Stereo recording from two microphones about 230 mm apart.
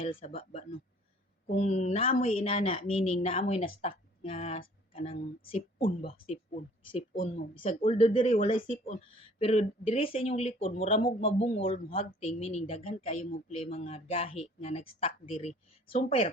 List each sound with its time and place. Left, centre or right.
0.0 s speech: left